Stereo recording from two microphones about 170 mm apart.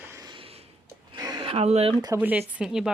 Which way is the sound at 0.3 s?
35° right (ahead or behind).